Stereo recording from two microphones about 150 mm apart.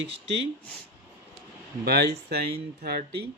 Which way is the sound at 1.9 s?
90° right.